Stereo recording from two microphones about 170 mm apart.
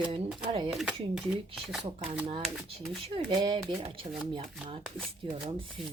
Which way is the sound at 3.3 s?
25° right (ahead or behind).